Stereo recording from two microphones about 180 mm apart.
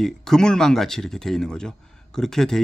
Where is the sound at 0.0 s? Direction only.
5° left (ahead or behind).